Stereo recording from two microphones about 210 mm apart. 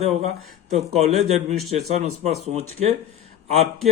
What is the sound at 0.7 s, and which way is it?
Speech, 30° right (ahead or behind).